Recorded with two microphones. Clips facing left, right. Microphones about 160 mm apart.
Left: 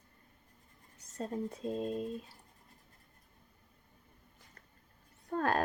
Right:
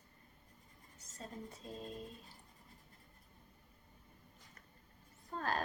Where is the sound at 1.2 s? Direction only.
65° left (ahead or behind).